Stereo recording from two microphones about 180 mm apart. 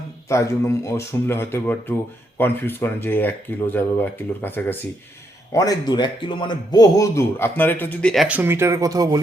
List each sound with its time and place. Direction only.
0.3 s a man's voice: 15° left (ahead or behind); by 9.2 s 20° right (ahead or behind)